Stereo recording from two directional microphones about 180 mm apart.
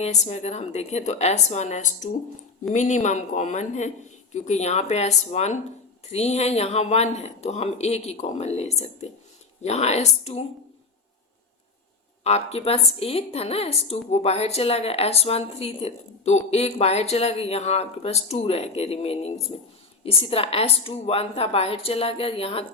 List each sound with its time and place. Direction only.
0.0 s a woman's voice: 40° left (ahead or behind)
12.2 s a woman's voice: 35° left (ahead or behind)